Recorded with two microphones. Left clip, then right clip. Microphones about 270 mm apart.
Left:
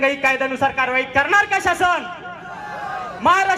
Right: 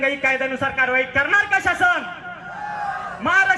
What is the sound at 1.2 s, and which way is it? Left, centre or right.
Speech, left.